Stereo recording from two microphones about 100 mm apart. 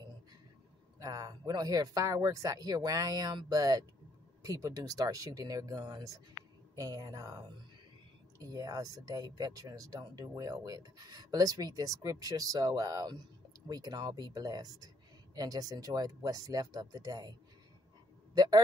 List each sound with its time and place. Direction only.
0.9 s speech: 40° right (ahead or behind)